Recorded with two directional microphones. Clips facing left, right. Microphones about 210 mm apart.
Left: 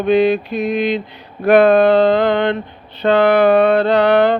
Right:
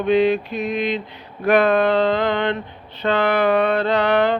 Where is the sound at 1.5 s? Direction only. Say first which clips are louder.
Left 6 dB; 35° left (ahead or behind).